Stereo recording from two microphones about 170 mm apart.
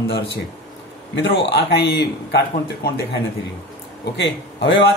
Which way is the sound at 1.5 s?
70° left (ahead or behind).